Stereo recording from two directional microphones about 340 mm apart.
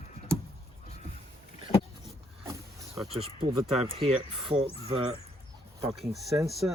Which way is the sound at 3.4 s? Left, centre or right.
Centre.